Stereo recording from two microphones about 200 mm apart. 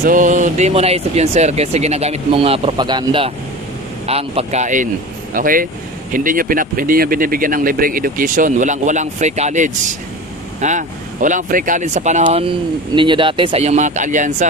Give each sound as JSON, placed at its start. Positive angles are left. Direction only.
{"t": 0.0, "sound": "speech", "side_deg": -40}
{"t": 12.4, "sound": "speech", "side_deg": -25}